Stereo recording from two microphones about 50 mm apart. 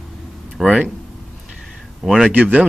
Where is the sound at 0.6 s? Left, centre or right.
Centre.